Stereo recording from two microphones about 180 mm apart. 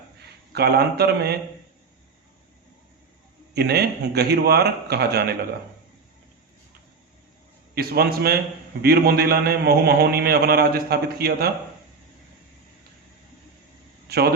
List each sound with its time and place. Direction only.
0.5 s a man's voice: 65° right (ahead or behind)
3.5 s a man's voice: 60° right (ahead or behind)
7.8 s a man's voice: 60° right (ahead or behind)
14.1 s a man's voice: 65° right (ahead or behind)